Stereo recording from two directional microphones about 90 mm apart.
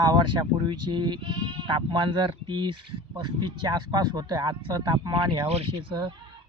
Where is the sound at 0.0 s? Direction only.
50° right (ahead or behind).